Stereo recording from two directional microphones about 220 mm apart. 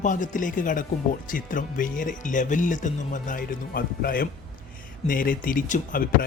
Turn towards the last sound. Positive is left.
turn(degrees=40)  # may be behind; listen again after turning